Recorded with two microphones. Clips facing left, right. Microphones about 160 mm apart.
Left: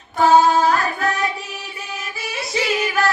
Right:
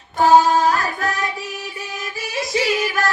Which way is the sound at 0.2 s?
35° right (ahead or behind).